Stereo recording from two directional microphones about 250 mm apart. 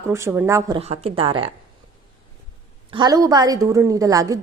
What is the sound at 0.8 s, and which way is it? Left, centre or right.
Speech, right.